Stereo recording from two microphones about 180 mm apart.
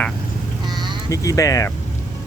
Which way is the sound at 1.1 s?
20° left (ahead or behind).